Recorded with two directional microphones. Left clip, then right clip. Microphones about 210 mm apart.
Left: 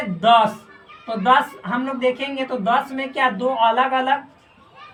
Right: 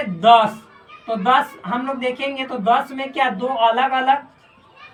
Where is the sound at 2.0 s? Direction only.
15° left (ahead or behind).